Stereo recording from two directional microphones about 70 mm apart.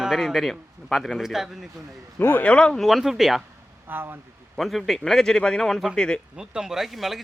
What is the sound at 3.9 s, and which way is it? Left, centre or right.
Speech, right.